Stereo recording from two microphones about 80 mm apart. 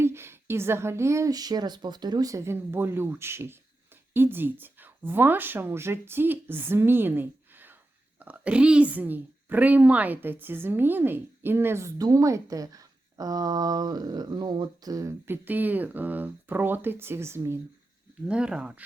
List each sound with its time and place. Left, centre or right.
0.0 s a woman's voice: right
2.3 s a woman's voice: right
15.3 s speech: right
18.3 s speech: centre